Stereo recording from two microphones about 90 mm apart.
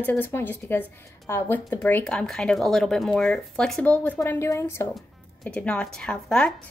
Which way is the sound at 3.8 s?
15° left (ahead or behind).